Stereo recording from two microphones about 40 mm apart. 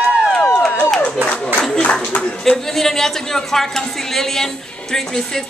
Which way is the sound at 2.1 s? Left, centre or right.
Left.